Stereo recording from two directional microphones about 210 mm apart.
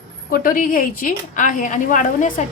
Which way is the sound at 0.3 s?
45° left (ahead or behind).